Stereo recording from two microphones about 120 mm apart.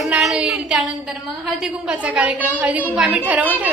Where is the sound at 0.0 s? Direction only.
Centre (ahead or behind).